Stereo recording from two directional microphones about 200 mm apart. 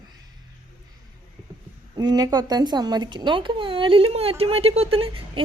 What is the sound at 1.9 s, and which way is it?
A woman's voice, 20° right (ahead or behind).